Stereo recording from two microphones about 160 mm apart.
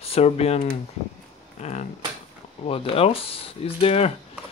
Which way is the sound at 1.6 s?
45° left (ahead or behind).